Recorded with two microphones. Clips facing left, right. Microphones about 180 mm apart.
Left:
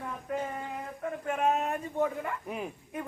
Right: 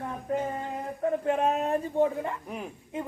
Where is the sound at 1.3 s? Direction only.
35° right (ahead or behind).